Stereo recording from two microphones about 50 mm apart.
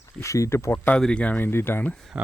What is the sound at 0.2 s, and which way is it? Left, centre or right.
Speech, left.